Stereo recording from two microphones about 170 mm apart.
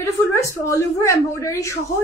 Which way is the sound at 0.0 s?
15° left (ahead or behind).